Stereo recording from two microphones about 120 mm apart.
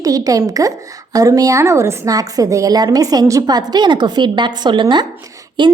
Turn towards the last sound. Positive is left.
turn(degrees=-40)  # may be behind; listen again after turning